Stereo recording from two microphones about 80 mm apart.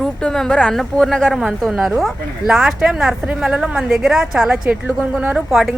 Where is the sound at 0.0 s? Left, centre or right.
Centre.